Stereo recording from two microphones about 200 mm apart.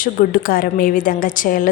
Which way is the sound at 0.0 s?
45° left (ahead or behind).